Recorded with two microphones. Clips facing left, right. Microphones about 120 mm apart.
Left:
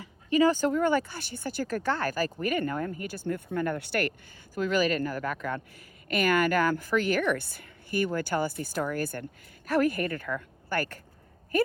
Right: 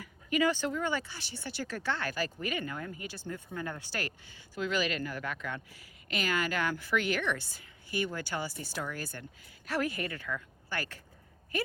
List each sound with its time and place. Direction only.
0.0 s speech: 35° left (ahead or behind); by 4.1 s 65° left (ahead or behind)
4.5 s speech: 45° left (ahead or behind)